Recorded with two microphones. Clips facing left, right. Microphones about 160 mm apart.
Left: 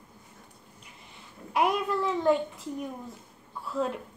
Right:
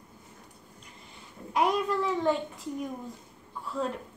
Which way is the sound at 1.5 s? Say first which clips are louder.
Even; 5° left (ahead or behind).